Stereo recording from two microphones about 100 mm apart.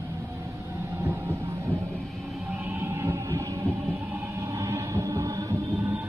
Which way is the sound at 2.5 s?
20° right (ahead or behind).